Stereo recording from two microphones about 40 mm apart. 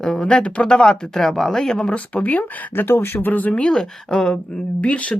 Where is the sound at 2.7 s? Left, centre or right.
Left.